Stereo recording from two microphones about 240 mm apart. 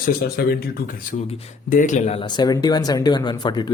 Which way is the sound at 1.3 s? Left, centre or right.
Left.